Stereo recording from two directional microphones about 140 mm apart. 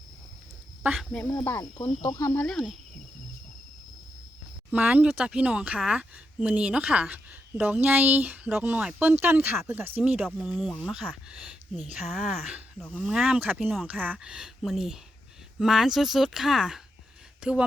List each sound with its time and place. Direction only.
0.8 s speech: 10° right (ahead or behind)
1.2 s speech: 25° left (ahead or behind)
2.3 s speech: 10° left (ahead or behind)
4.7 s speech: 10° right (ahead or behind)